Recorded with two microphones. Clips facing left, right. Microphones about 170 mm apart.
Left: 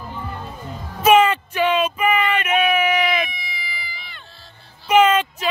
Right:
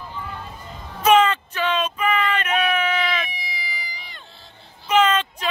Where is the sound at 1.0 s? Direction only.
10° left (ahead or behind).